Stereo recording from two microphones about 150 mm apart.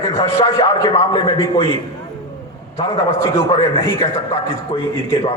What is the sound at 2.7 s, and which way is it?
A man's voice, 25° left (ahead or behind).